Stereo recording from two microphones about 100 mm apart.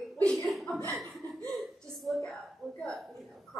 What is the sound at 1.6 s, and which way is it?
Hiccup, 5° left (ahead or behind).